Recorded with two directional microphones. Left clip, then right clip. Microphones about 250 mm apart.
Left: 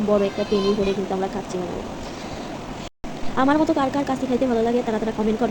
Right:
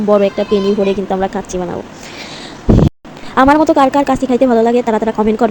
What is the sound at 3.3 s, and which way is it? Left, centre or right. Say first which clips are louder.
Speech: right 10 dB; right.